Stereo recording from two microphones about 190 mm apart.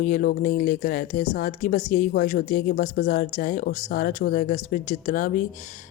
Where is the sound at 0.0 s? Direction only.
45° left (ahead or behind).